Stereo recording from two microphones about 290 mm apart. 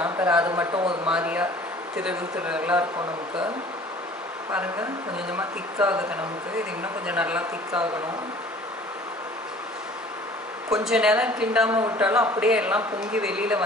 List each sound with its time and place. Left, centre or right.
0.0 s a man's voice: centre
4.5 s a man's voice: centre
10.7 s a woman's voice: centre